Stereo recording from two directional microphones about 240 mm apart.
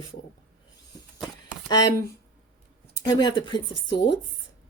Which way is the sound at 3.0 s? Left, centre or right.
Centre.